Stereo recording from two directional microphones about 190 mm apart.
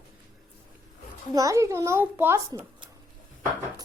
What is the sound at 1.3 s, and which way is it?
A child's voice, 15° right (ahead or behind).